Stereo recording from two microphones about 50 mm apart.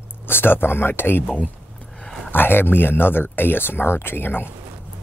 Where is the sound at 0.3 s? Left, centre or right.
Left.